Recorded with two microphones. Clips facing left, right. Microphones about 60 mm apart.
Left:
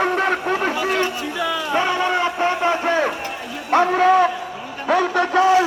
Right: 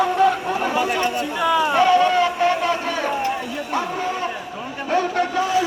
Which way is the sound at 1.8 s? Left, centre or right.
Centre.